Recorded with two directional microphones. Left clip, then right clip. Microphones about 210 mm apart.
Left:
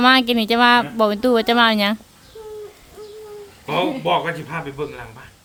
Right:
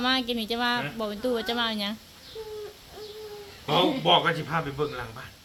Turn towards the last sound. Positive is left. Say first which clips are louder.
# left 1 dB
turn(degrees=10)  # may be behind; listen again after turning